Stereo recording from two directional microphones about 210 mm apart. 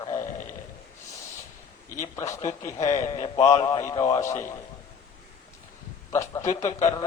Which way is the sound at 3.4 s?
15° left (ahead or behind).